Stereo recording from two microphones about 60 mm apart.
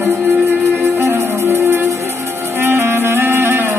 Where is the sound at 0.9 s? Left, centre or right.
Right.